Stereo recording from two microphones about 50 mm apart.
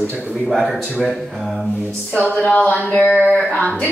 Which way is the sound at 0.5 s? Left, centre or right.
Centre.